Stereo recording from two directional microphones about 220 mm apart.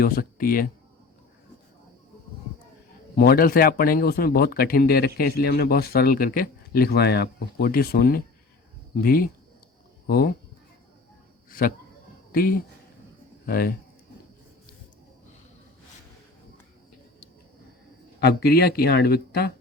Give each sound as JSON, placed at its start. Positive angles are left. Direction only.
{"t": 0.0, "sound": "speech", "side_deg": 40}
{"t": 3.2, "sound": "speech", "side_deg": 40}
{"t": 12.3, "sound": "speech", "side_deg": 40}
{"t": 18.2, "sound": "speech", "side_deg": 45}